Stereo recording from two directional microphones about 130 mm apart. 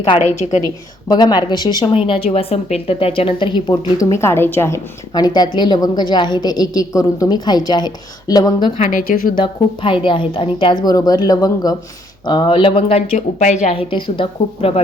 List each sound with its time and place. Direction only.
0.2 s a woman's voice: 65° left (ahead or behind)
1.0 s a woman's voice: 35° left (ahead or behind)
1.9 s a woman's voice: 45° left (ahead or behind)
4.1 s a woman's voice: 20° left (ahead or behind)
8.8 s speech: 90° left
9.4 s a woman's voice: 40° left (ahead or behind)
10.8 s a woman's voice: 30° left (ahead or behind); by 13.1 s 45° left (ahead or behind)
13.1 s a woman's voice: 65° left (ahead or behind)
13.8 s a woman's voice: 40° left (ahead or behind)